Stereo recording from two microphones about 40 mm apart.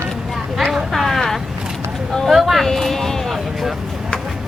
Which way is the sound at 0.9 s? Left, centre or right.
Centre.